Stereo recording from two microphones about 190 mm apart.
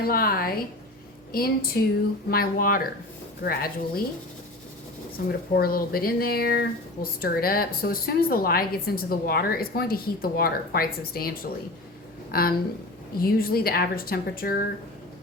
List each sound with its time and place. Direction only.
0.0 s speech: 50° left (ahead or behind)
5.1 s speech: 50° left (ahead or behind)